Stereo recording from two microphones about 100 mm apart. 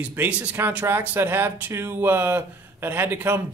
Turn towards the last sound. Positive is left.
turn(degrees=-20)  # may be behind; listen again after turning